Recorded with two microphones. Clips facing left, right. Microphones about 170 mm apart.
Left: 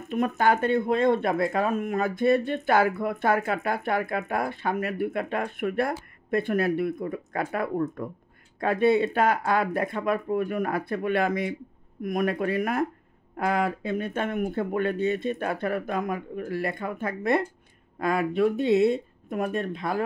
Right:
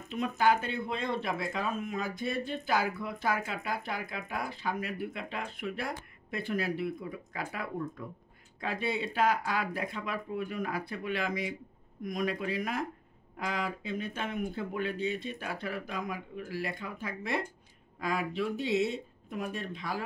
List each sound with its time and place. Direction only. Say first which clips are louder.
0.1 s speech: left 5 dB; 50° left (ahead or behind)